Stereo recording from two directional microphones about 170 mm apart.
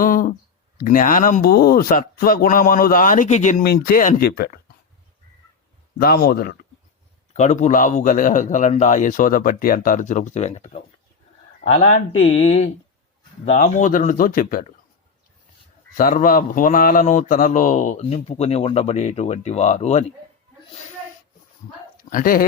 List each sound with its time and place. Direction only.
0.0 s a sound: 55° left (ahead or behind)
0.8 s speech: 50° left (ahead or behind)
3.6 s speech: 65° left (ahead or behind)
6.0 s speech: 65° left (ahead or behind)
7.3 s speech: 45° left (ahead or behind)
16.0 s speech: 55° left (ahead or behind)
22.1 s speech: 55° left (ahead or behind)